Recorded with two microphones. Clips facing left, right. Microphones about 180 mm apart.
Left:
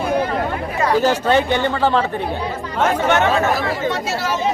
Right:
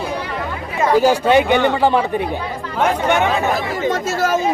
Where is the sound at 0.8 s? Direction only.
15° right (ahead or behind).